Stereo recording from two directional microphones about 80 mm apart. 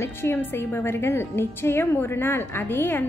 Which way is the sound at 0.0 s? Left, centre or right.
Left.